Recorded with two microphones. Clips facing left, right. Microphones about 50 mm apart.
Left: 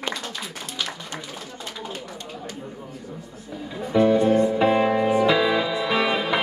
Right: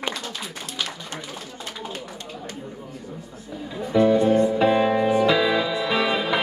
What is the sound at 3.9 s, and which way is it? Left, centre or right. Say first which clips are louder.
Music: even; left.